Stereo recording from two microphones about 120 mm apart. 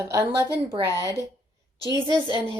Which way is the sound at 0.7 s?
45° right (ahead or behind).